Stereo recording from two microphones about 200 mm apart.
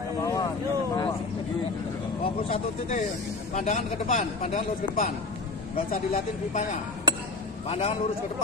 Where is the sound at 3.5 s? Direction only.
40° left (ahead or behind).